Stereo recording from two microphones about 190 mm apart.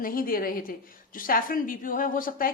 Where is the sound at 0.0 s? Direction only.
50° left (ahead or behind).